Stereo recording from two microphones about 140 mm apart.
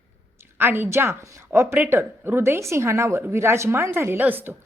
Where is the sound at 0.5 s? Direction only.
15° right (ahead or behind).